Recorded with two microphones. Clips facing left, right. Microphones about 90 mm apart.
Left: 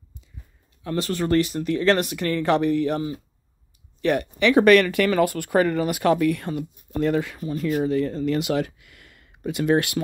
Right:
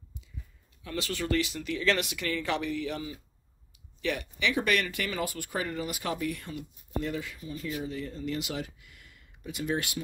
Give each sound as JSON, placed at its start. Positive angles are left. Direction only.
{"t": 0.8, "sound": "speech", "side_deg": 45}